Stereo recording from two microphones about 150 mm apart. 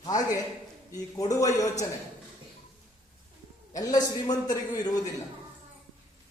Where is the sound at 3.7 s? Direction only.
25° left (ahead or behind).